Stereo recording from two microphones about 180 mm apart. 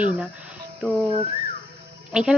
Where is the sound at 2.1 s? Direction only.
5° right (ahead or behind).